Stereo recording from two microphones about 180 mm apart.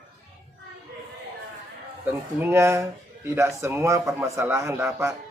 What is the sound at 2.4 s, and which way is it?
A man's voice, 15° right (ahead or behind).